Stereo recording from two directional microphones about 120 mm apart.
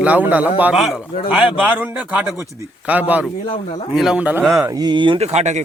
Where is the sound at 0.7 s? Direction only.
Centre (ahead or behind).